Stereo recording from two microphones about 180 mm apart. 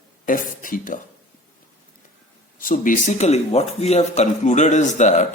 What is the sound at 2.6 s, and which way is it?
A man's voice, 50° left (ahead or behind).